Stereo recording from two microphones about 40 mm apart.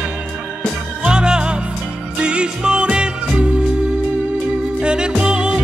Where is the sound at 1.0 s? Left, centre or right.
Right.